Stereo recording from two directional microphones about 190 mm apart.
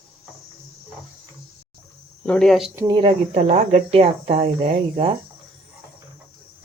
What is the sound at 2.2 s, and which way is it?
Speech, 5° left (ahead or behind).